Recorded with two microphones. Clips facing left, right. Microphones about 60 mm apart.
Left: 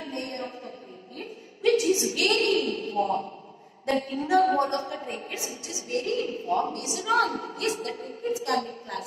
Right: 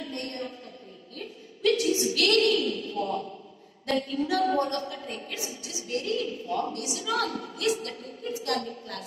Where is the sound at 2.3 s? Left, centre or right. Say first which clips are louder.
Right 1 dB; left.